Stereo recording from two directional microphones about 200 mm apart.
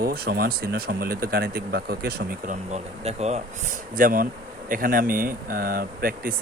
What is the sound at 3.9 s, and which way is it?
Speech, 45° right (ahead or behind).